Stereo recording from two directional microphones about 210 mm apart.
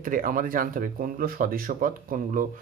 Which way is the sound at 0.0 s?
40° right (ahead or behind).